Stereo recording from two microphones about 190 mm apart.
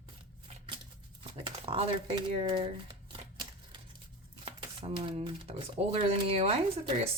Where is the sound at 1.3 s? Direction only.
30° right (ahead or behind).